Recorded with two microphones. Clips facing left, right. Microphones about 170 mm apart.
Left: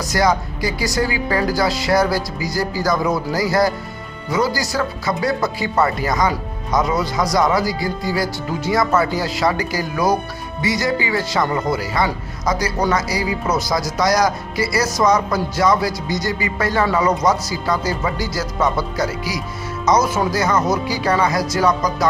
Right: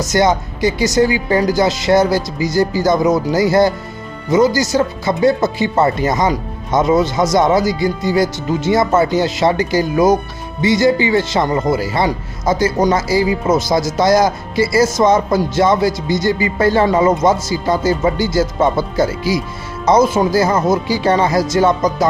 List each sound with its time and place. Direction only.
0.0 s speech: 25° right (ahead or behind)